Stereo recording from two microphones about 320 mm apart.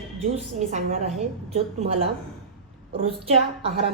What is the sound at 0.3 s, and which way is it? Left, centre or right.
A woman's voice, right.